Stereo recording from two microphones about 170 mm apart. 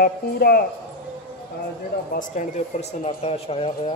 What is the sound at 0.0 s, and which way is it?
Speech, 65° left (ahead or behind).